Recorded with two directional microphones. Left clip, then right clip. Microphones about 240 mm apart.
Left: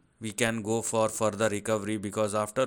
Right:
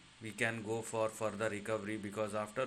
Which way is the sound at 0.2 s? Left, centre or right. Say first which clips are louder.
Left 8 dB; left.